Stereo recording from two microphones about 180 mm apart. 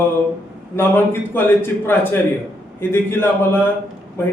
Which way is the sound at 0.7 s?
10° left (ahead or behind).